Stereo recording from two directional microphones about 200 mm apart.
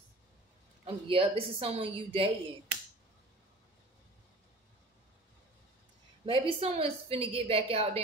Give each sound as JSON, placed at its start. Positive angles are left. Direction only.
{"t": 0.8, "sound": "a woman's voice", "side_deg": -25}
{"t": 6.2, "sound": "a woman's voice", "side_deg": -25}